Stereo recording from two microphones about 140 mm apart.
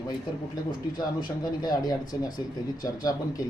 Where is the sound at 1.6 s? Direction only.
30° left (ahead or behind).